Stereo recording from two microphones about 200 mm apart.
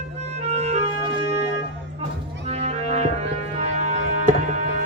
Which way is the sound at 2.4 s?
35° right (ahead or behind).